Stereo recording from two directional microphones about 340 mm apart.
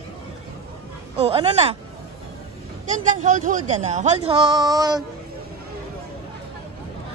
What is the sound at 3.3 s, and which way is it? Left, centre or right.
Speech, right.